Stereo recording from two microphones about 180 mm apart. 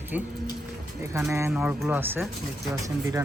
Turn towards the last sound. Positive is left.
turn(degrees=-15)  # may be behind; listen again after turning